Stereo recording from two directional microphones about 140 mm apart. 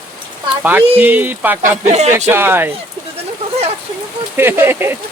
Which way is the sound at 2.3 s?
15° right (ahead or behind).